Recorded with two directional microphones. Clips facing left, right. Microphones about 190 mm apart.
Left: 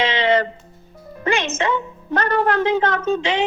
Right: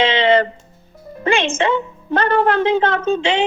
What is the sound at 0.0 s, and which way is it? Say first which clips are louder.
Music: right 3 dB; 25° right (ahead or behind).